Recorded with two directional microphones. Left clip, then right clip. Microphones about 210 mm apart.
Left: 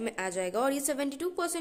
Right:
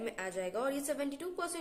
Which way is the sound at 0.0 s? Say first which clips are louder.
Left 5 dB; 45° left (ahead or behind).